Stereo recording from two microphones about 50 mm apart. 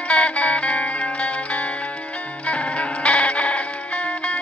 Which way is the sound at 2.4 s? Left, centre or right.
Left.